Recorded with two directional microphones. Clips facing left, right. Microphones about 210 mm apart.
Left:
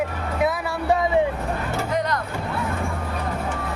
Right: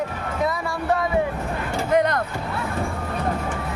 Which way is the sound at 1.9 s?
55° right (ahead or behind).